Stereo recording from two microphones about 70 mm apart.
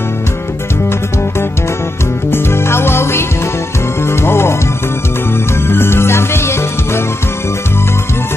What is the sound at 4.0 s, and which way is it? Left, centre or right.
Speech, left.